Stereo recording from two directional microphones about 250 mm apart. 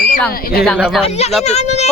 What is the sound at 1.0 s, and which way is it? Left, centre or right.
Speech, left.